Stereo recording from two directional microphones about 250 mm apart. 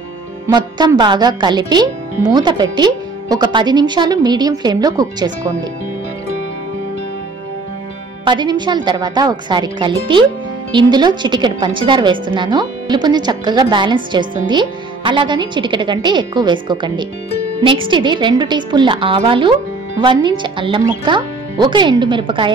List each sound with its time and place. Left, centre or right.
0.5 s speech: centre
8.3 s speech: centre